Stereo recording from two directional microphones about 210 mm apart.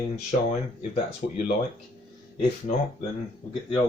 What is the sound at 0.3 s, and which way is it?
Speech, 35° left (ahead or behind).